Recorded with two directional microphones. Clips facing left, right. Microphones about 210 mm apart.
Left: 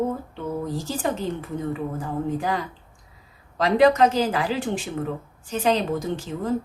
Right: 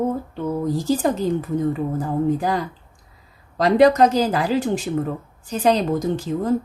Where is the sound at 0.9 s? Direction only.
40° right (ahead or behind).